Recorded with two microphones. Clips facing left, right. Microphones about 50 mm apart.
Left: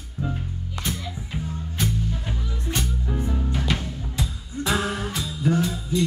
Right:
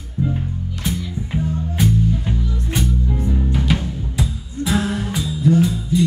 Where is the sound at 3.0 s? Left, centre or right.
Left.